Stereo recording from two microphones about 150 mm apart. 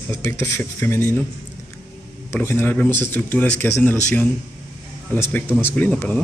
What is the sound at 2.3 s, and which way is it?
A man's voice, 15° left (ahead or behind).